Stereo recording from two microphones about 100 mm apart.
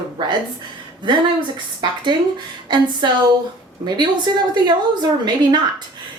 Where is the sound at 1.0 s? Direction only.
50° right (ahead or behind).